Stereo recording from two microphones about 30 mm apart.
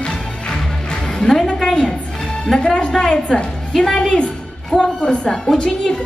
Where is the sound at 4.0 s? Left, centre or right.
Left.